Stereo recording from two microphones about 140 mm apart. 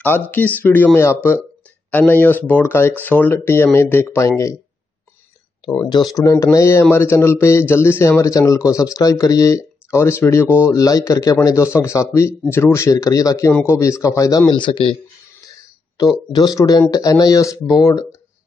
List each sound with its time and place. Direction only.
0.0 s speech: 10° left (ahead or behind)
6.1 s a man's voice: 20° left (ahead or behind)
14.5 s speech: 40° left (ahead or behind)
16.0 s a man's voice: 30° left (ahead or behind)